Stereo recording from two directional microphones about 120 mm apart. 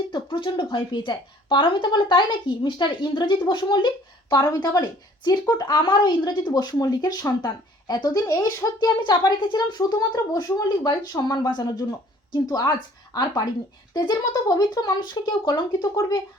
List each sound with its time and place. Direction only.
0.1 s speech: 45° left (ahead or behind)